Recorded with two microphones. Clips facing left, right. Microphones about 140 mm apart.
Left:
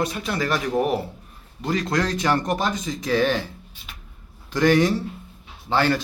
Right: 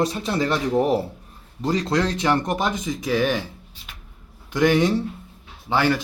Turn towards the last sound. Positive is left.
turn(degrees=-15)  # may be behind; listen again after turning